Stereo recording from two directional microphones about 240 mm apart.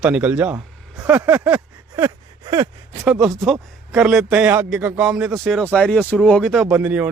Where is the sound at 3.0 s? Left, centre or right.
Centre.